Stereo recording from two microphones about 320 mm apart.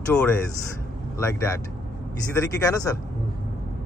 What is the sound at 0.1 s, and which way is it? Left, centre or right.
A man's voice, centre.